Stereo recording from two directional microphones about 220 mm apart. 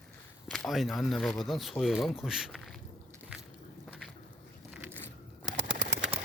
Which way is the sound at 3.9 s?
Centre (ahead or behind).